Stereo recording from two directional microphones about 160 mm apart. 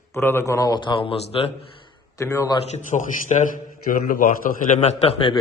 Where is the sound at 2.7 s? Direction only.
50° left (ahead or behind).